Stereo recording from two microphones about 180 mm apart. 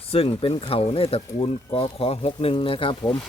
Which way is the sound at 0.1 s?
30° left (ahead or behind).